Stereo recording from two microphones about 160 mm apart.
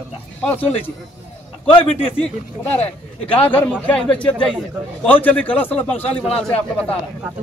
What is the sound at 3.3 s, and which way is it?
Speech, 10° left (ahead or behind).